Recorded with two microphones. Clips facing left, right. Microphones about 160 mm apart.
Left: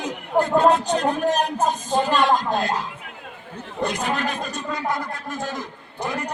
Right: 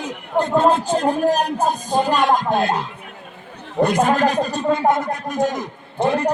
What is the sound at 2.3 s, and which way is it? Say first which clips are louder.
Speech: right 4 dB; 55° right (ahead or behind).